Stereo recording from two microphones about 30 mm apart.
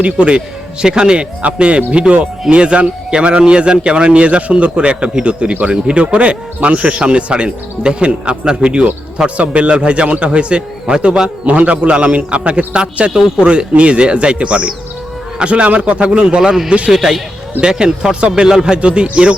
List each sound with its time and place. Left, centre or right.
0.0 s speech: right
0.3 s speech: right
1.4 s speech: right
11.4 s speech: right
16.4 s a man's voice: centre
16.6 s speech: right
16.9 s a man's voice: centre
17.6 s speech: right
18.8 s speech: right